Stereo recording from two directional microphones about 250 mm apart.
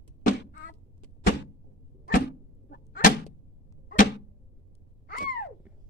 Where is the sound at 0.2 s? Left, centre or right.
Left.